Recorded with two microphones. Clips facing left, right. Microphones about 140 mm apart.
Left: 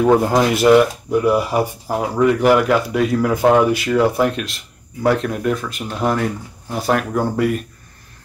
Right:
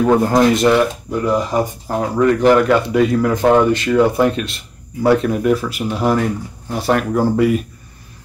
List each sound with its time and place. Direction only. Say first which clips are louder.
0.0 s speech: right 1 dB; 5° left (ahead or behind)